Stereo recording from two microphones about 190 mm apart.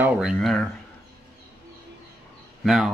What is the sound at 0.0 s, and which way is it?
Speech, 5° right (ahead or behind).